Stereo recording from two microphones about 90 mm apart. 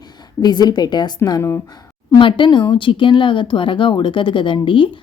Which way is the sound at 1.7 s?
45° left (ahead or behind).